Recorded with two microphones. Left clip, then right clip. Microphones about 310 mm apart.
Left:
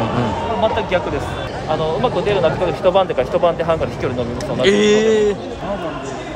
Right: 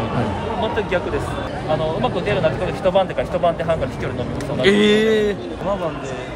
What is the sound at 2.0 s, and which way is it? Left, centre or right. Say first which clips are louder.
Speech: left 3 dB; centre.